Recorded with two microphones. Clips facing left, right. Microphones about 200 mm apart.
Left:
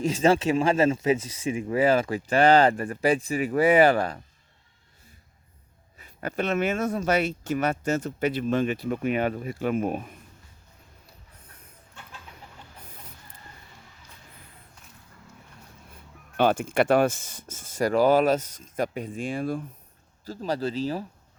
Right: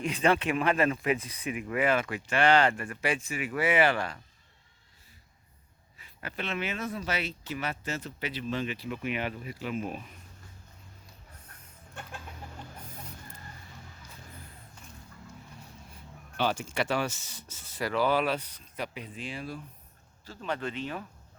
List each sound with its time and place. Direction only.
0.2 s speech: 30° left (ahead or behind)
6.0 s speech: 45° left (ahead or behind)
16.4 s speech: 55° left (ahead or behind)
20.2 s speech: 40° left (ahead or behind)